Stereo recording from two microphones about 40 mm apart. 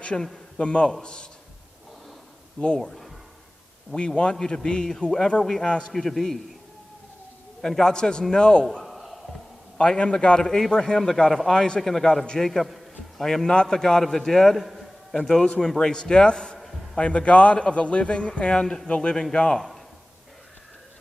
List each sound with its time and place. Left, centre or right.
0.1 s a man's voice: left
2.8 s a man's voice: centre
3.9 s a man's voice: left; by 6.4 s centre
7.6 s a man's voice: centre
8.8 s a sound: centre
9.8 s a man's voice: left
10.7 s a man's voice: centre
15.1 s a man's voice: centre